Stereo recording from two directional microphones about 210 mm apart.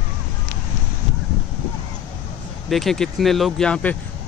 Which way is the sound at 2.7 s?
Centre (ahead or behind).